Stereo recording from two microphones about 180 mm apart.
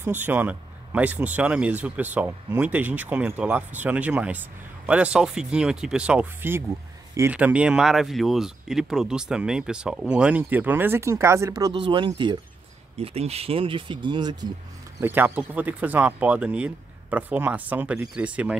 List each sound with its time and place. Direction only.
0.0 s speech: 10° right (ahead or behind)
15.0 s speech: 10° right (ahead or behind)